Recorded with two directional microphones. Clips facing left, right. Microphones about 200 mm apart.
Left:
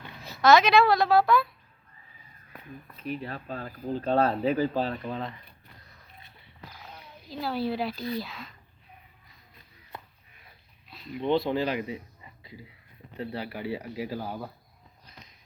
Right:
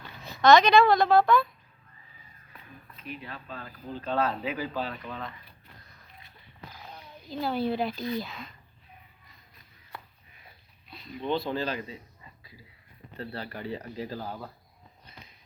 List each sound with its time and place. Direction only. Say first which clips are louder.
0.2 s a woman's voice: right 1 dB; centre (ahead or behind)
3.0 s speech: left 7 dB; 40° left (ahead or behind)
6.8 s a woman's voice: right 3 dB; centre (ahead or behind)
10.8 s a sound: left 1 dB; centre (ahead or behind)
11.2 s speech: left 4 dB; 20° left (ahead or behind)
12.4 s a sound: left 7 dB; 25° left (ahead or behind)
13.1 s speech: left 3 dB; 10° left (ahead or behind)